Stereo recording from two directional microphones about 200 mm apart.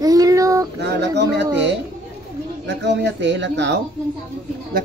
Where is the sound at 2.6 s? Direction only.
60° right (ahead or behind).